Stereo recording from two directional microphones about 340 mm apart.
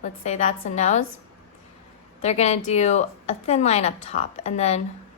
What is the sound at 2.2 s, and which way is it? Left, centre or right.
A woman's voice, centre.